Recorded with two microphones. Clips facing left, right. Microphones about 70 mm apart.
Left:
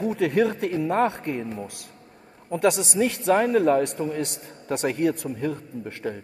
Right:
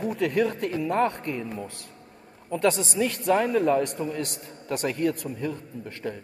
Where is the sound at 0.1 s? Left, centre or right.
Left.